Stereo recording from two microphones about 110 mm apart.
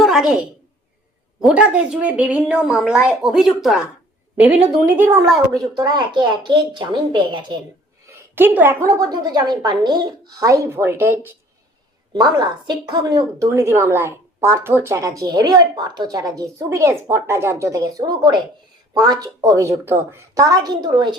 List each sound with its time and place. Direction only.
0.0 s a sound: 5° right (ahead or behind)
1.4 s a woman's voice: 5° right (ahead or behind)
5.7 s speech: 40° right (ahead or behind)
8.0 s a sound: 20° right (ahead or behind)
8.9 s a woman's voice: 35° right (ahead or behind)
12.1 s a woman's voice: 40° right (ahead or behind)